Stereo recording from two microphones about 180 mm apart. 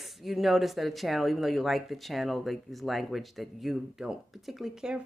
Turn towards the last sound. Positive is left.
turn(degrees=-5)  # may be behind; listen again after turning